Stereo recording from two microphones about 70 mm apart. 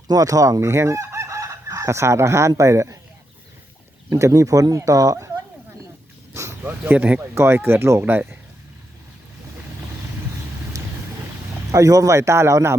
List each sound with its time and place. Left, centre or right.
0.1 s chicken: right
2.6 s a man's voice: right
4.1 s a man's voice: right
6.3 s a sound: right
6.7 s speech: right
7.3 s speech: right
11.7 s a man's voice: right